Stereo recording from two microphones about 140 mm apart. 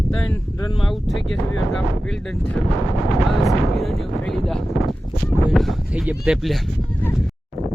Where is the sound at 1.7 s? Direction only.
5° left (ahead or behind).